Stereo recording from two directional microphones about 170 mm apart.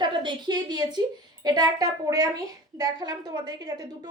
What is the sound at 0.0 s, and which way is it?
A woman's voice, 25° right (ahead or behind).